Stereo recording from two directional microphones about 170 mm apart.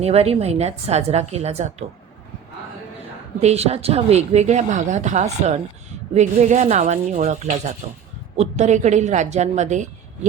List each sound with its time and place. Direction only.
0.0 s speech: 35° right (ahead or behind)
3.4 s speech: 40° right (ahead or behind)